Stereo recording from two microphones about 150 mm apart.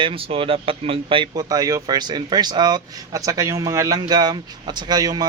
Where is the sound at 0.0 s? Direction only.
40° right (ahead or behind).